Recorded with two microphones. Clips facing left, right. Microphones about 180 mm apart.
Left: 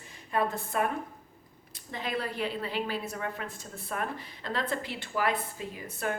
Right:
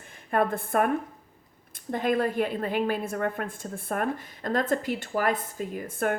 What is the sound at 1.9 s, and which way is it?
Speech, 50° right (ahead or behind).